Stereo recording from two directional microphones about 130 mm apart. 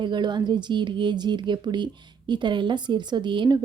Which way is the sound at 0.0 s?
35° right (ahead or behind).